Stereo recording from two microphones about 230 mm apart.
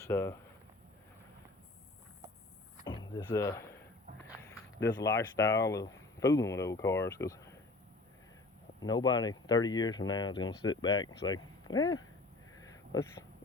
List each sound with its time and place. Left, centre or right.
0.0 s speech: centre
2.8 s power windows: centre
3.3 s speech: centre
8.8 s speech: centre
12.5 s a sound: centre